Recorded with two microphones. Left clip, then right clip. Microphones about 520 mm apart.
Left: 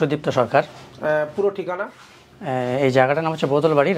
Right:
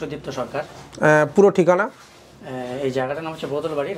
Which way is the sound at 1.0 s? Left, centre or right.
Right.